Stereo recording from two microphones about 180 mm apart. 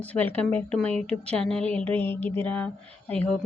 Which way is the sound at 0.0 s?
10° left (ahead or behind).